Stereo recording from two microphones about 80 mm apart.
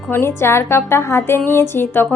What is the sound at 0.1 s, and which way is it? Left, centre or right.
A woman's voice, left.